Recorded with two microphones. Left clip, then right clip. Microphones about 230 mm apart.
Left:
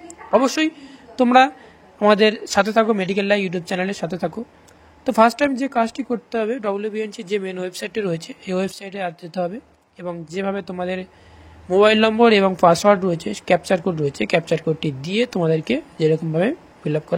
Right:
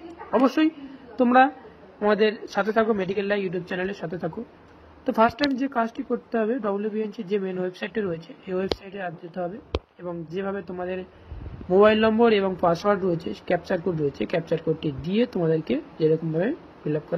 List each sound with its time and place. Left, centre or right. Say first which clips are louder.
0.3 s a woman's voice: left 4 dB; left
2.0 s speech: left 6 dB; left
13.3 s speech: left 7 dB; left
13.7 s speech: left 5 dB; left
15.1 s speech: left 4 dB; left
15.4 s speech: left 4 dB; left